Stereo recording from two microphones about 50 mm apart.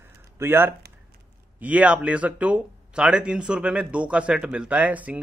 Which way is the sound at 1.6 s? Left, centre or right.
Right.